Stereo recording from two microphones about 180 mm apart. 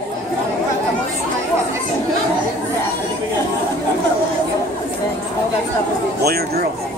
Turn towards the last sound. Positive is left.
turn(degrees=-60)  # may be behind; listen again after turning